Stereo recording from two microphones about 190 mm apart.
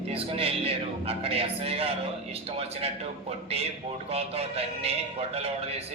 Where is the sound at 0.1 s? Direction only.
30° right (ahead or behind).